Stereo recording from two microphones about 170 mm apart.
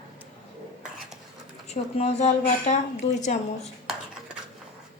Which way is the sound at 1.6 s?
40° left (ahead or behind).